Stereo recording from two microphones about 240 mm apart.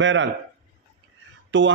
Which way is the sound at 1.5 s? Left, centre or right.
Right.